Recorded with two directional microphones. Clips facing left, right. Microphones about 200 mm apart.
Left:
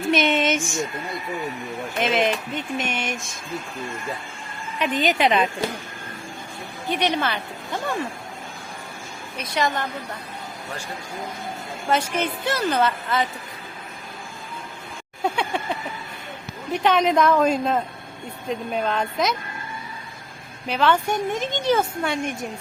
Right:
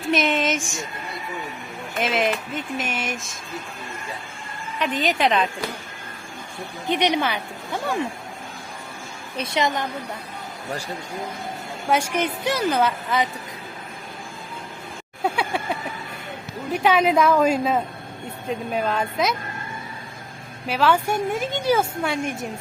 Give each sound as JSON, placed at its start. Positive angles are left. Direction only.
{"t": 0.1, "sound": "a sound", "side_deg": 0}
{"t": 2.0, "sound": "speech", "side_deg": 0}
{"t": 4.8, "sound": "speech", "side_deg": 0}
{"t": 6.8, "sound": "a woman's voice", "side_deg": -20}
{"t": 9.4, "sound": "a woman's voice", "side_deg": -20}
{"t": 11.9, "sound": "a woman's voice", "side_deg": -10}
{"t": 15.2, "sound": "a sound", "side_deg": -5}
{"t": 16.7, "sound": "a woman's voice", "side_deg": -5}
{"t": 20.7, "sound": "a woman's voice", "side_deg": -5}